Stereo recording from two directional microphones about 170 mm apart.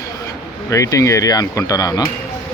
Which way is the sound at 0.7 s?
20° left (ahead or behind).